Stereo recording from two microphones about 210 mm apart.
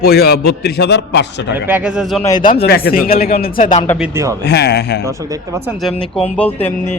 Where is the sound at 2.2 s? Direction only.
15° left (ahead or behind).